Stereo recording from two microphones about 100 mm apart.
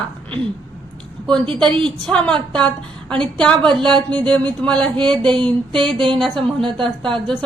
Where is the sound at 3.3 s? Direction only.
10° left (ahead or behind).